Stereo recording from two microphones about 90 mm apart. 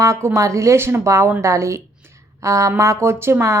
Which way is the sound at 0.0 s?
35° right (ahead or behind).